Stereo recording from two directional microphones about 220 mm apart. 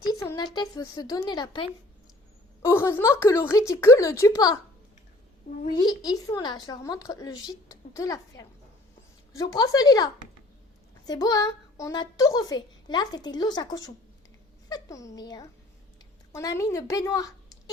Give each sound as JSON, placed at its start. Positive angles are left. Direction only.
{"t": 0.1, "sound": "a child's voice", "side_deg": 15}
{"t": 5.6, "sound": "a woman's voice", "side_deg": 20}